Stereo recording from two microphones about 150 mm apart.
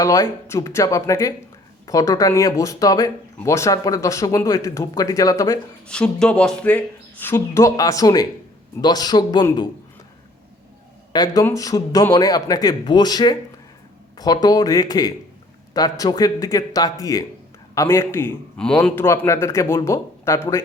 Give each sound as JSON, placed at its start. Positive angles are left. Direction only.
{"t": 0.0, "sound": "speech", "side_deg": 20}
{"t": 5.9, "sound": "speech", "side_deg": 5}
{"t": 11.1, "sound": "speech", "side_deg": 30}
{"t": 18.5, "sound": "speech", "side_deg": 5}